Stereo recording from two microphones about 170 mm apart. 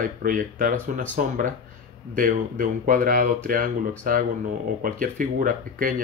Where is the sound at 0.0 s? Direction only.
55° right (ahead or behind).